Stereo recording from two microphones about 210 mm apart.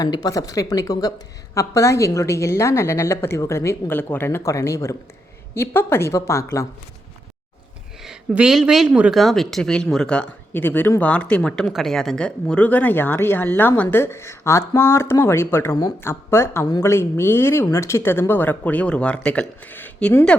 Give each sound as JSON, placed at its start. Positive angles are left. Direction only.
{"t": 0.0, "sound": "speech", "side_deg": 20}
{"t": 8.0, "sound": "speech", "side_deg": -5}